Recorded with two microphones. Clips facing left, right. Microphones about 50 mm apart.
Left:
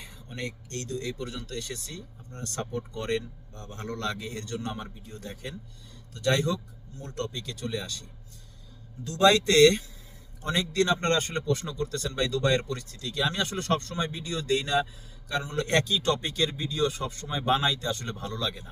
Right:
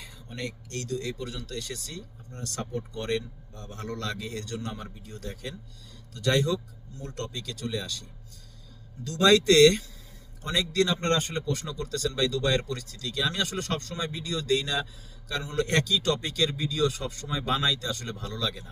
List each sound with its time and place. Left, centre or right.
0.0 s a man's voice: left
9.2 s a man's voice: left